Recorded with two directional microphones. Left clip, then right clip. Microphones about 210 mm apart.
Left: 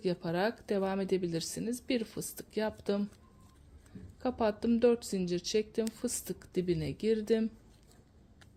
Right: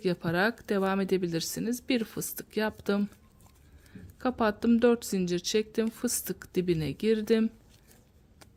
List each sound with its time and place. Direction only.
0.0 s speech: 25° right (ahead or behind)
4.2 s speech: 25° right (ahead or behind)